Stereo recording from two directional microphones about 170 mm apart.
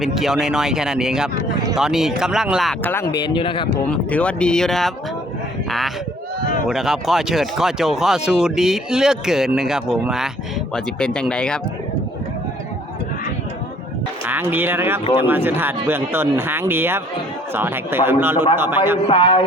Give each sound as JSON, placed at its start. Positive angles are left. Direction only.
{"t": 0.0, "sound": "speech", "side_deg": 0}
{"t": 2.8, "sound": "speech", "side_deg": 15}
{"t": 3.2, "sound": "speech", "side_deg": 30}
{"t": 3.9, "sound": "speech", "side_deg": 5}
{"t": 6.7, "sound": "speech", "side_deg": 0}
{"t": 14.3, "sound": "speech", "side_deg": -10}
{"t": 19.0, "sound": "speech", "side_deg": 30}